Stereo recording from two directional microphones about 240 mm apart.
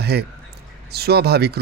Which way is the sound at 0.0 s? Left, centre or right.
Right.